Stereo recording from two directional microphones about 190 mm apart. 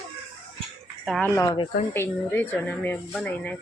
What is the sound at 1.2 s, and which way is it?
Speech, 20° left (ahead or behind).